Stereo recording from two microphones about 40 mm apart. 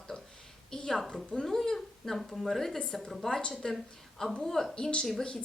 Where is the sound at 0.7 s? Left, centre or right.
Centre.